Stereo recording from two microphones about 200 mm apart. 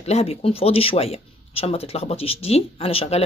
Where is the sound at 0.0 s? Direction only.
30° left (ahead or behind).